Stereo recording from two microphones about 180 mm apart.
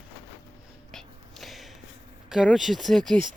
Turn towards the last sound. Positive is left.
turn(degrees=0)  # may be behind; listen again after turning